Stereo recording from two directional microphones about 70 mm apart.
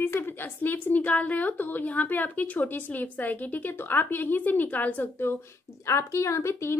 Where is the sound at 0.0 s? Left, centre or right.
Left.